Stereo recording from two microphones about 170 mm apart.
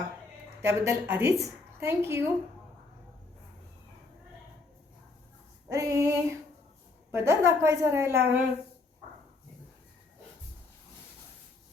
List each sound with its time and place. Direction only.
0.6 s a woman's voice: 15° right (ahead or behind)
5.6 s a woman's voice: 20° right (ahead or behind)